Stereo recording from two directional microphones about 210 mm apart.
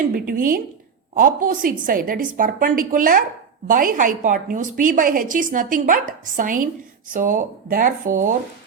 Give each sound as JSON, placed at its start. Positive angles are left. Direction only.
{"t": 0.1, "sound": "a woman's voice", "side_deg": -40}